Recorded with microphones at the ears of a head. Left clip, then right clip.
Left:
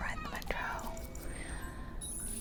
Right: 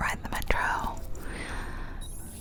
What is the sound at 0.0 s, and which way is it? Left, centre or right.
Whispering, right.